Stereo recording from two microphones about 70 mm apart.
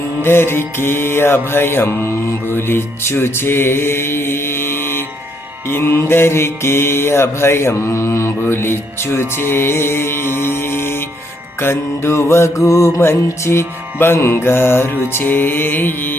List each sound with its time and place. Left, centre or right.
0.2 s music: left